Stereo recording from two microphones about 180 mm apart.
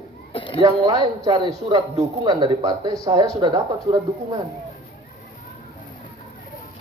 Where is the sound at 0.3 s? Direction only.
30° left (ahead or behind).